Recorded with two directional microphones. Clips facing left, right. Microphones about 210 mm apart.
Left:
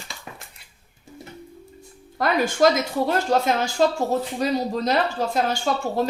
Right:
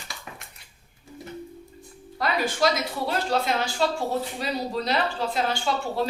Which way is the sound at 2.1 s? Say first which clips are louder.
Left 5 dB; 50° left (ahead or behind).